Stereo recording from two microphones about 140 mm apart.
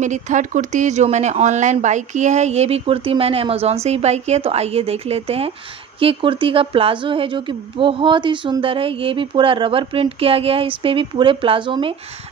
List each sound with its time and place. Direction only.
0.0 s a woman's voice: 60° right (ahead or behind); by 11.9 s 35° right (ahead or behind)